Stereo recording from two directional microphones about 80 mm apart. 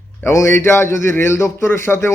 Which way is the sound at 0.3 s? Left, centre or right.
Left.